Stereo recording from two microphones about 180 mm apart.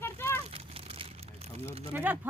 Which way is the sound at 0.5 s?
30° right (ahead or behind).